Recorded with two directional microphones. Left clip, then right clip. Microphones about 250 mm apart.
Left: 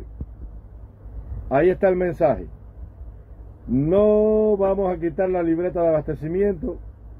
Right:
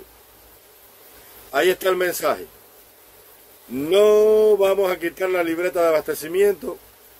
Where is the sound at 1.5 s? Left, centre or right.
Centre.